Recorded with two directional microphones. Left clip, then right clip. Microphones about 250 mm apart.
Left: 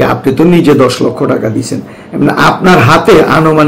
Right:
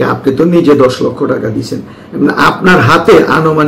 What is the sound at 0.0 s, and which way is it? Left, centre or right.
A man's voice, left.